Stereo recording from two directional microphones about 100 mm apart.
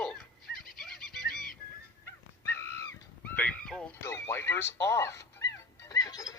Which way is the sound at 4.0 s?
25° left (ahead or behind).